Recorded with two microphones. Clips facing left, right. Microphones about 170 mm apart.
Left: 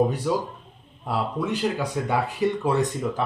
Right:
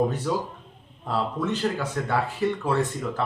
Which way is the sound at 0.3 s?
15° left (ahead or behind).